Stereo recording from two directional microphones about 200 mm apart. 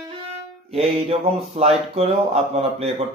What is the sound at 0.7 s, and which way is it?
Speech, 30° right (ahead or behind).